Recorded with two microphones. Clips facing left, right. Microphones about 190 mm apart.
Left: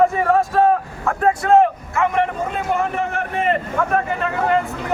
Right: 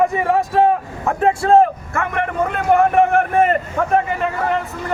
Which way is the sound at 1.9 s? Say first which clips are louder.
Left 2 dB; 55° right (ahead or behind).